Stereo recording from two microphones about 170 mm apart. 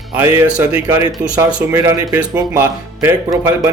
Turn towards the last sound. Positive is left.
turn(degrees=-15)  # may be behind; listen again after turning